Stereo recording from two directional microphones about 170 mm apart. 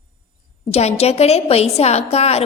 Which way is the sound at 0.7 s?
40° left (ahead or behind).